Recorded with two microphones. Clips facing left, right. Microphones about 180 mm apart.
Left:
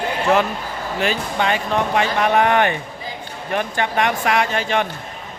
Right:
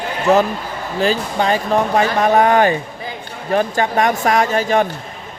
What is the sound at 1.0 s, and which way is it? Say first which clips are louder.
Speech: right 4 dB; 35° right (ahead or behind).